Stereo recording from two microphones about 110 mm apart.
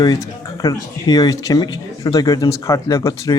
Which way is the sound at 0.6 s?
35° left (ahead or behind).